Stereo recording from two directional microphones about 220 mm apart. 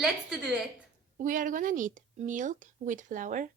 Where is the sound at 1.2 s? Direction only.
35° right (ahead or behind).